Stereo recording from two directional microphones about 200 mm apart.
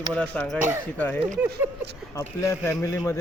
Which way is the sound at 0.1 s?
5° left (ahead or behind).